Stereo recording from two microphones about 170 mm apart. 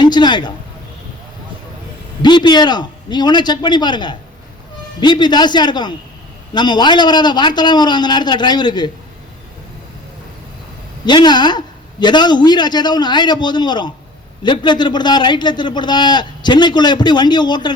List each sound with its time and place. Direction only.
0.0 s speech: 25° left (ahead or behind)
2.2 s a man's voice: 25° left (ahead or behind)
11.0 s a man's voice: 25° left (ahead or behind)